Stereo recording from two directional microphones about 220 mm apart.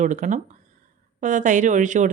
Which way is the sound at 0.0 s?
35° right (ahead or behind).